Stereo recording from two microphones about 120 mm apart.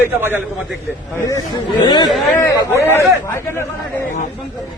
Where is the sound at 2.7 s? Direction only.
20° left (ahead or behind).